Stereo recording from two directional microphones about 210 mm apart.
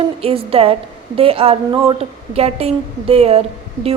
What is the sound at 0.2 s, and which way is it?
A woman's voice, 25° right (ahead or behind).